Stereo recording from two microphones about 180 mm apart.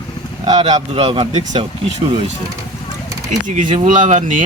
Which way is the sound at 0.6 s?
35° right (ahead or behind).